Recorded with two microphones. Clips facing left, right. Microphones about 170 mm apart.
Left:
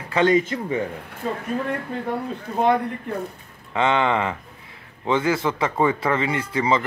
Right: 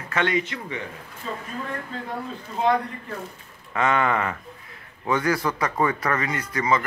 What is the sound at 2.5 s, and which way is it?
Speech, 60° left (ahead or behind).